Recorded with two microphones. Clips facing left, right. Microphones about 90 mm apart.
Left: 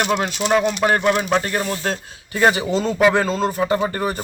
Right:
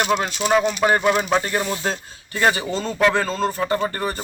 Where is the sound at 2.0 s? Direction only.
5° left (ahead or behind).